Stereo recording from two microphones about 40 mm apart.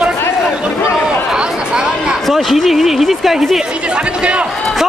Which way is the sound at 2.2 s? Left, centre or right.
Centre.